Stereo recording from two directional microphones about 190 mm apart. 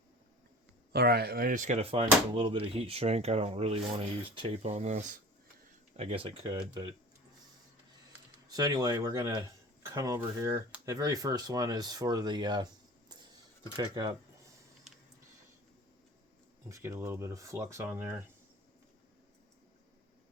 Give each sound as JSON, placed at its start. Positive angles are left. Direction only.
{"t": 0.9, "sound": "speech", "side_deg": -55}
{"t": 8.4, "sound": "speech", "side_deg": -20}
{"t": 13.7, "sound": "speech", "side_deg": -20}
{"t": 16.6, "sound": "speech", "side_deg": -15}